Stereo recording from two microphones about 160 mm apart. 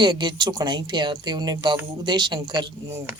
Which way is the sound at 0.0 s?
30° right (ahead or behind).